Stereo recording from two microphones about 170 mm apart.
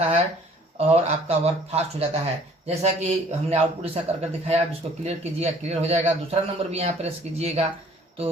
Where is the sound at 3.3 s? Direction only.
40° right (ahead or behind).